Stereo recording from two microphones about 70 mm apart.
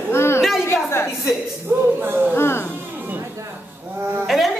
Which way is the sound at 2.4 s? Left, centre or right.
Left.